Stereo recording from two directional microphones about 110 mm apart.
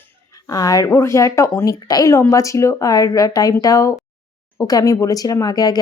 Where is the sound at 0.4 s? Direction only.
35° left (ahead or behind).